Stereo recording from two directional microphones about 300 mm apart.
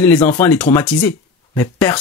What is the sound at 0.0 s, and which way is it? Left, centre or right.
Speech, centre.